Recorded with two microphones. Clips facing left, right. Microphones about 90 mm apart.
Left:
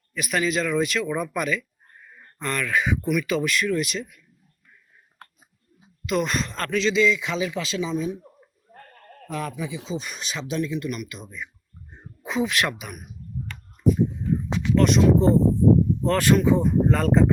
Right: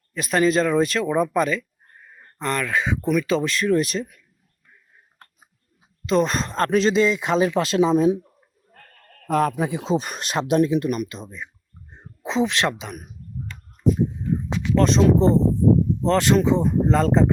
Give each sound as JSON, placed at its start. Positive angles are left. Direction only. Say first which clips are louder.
{"t": 0.1, "sound": "speech", "louder": "right 5 dB", "side_deg": -35}
{"t": 6.1, "sound": "speech", "louder": "right 4 dB", "side_deg": -35}
{"t": 8.7, "sound": "goat", "louder": "left 5 dB", "side_deg": 20}
{"t": 9.2, "sound": "speech", "louder": "right 9 dB", "side_deg": -55}
{"t": 11.9, "sound": "a sound", "louder": "right 3 dB", "side_deg": -25}
{"t": 14.8, "sound": "speech", "louder": "right 1 dB", "side_deg": -35}